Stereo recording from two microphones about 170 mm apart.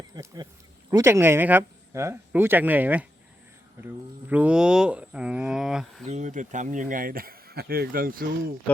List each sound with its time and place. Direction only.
0.1 s a sound: 25° right (ahead or behind)
0.9 s speech: 15° right (ahead or behind)
6.1 s speech: 45° right (ahead or behind)